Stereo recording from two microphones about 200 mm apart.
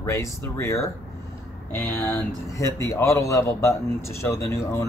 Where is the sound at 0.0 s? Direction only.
15° left (ahead or behind).